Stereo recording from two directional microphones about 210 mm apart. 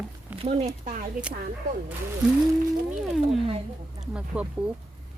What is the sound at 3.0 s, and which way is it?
Speech, centre (ahead or behind).